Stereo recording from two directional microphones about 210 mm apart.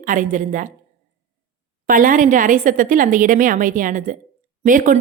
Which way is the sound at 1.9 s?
40° right (ahead or behind).